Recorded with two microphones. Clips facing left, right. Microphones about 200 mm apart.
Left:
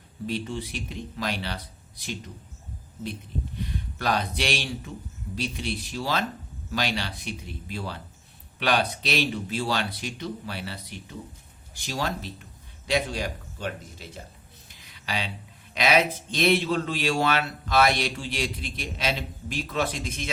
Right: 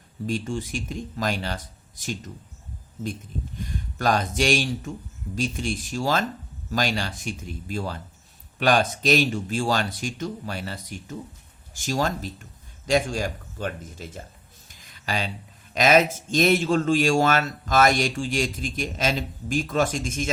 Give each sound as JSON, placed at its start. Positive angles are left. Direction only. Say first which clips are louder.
{"t": 0.3, "sound": "speech", "louder": "right 3 dB", "side_deg": -45}
{"t": 3.6, "sound": "speech", "louder": "right 5 dB", "side_deg": -45}
{"t": 14.7, "sound": "a sound", "louder": "right 3 dB", "side_deg": -45}
{"t": 15.7, "sound": "speech", "louder": "right 4 dB", "side_deg": -45}